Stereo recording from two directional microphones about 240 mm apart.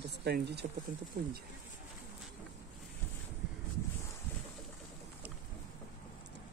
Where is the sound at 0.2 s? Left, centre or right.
Right.